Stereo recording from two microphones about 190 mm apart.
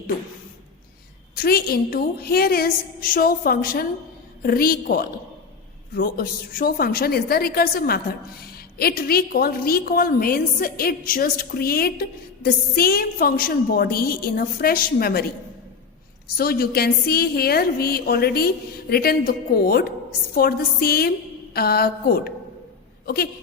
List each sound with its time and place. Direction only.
1.4 s a woman's voice: 55° left (ahead or behind)
16.4 s a woman's voice: 55° left (ahead or behind)